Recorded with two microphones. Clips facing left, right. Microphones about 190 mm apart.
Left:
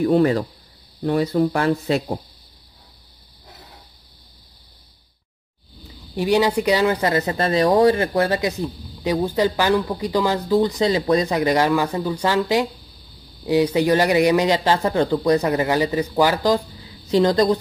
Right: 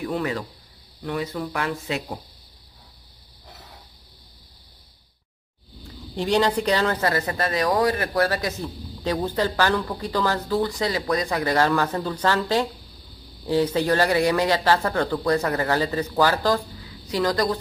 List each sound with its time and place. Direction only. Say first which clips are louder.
0.0 s speech: left 10 dB; 35° left (ahead or behind)
5.9 s speech: left 4 dB; 10° left (ahead or behind); by 17.6 s 25° left (ahead or behind)